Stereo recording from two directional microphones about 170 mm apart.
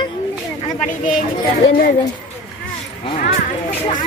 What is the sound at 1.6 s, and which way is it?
Speech, 60° left (ahead or behind).